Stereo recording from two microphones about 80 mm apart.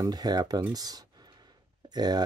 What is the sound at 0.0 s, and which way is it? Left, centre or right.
Speech, right.